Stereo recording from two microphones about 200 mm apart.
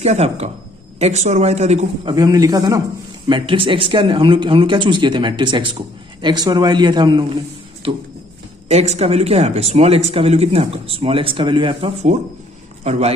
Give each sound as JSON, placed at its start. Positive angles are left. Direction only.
{"t": 0.0, "sound": "speech", "side_deg": -35}
{"t": 2.1, "sound": "speech", "side_deg": -20}
{"t": 7.8, "sound": "a sound", "side_deg": -25}
{"t": 8.6, "sound": "speech", "side_deg": -30}